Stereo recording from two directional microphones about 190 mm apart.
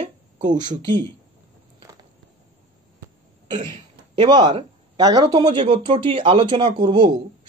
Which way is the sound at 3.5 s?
25° right (ahead or behind).